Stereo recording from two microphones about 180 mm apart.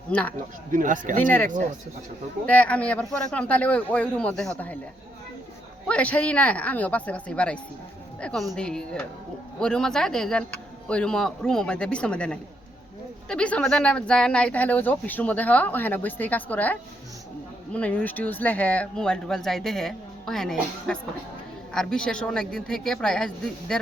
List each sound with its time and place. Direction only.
0.1 s speech: 5° left (ahead or behind)
0.7 s speech: 45° right (ahead or behind)
2.5 s speech: 10° left (ahead or behind)
5.9 s speech: 10° left (ahead or behind)